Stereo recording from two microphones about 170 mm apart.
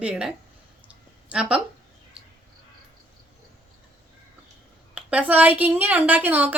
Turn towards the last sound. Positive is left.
turn(degrees=-10)  # may be behind; listen again after turning